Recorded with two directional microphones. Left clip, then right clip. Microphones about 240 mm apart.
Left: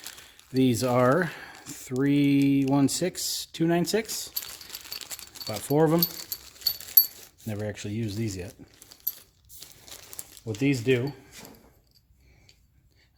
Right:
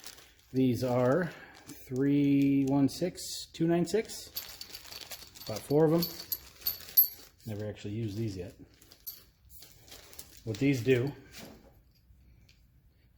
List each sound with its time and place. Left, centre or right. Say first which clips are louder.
0.5 s speech: left 5 dB; left
5.5 s speech: left 3 dB; left
7.5 s speech: left 5 dB; left
10.4 s speech: left 3 dB; left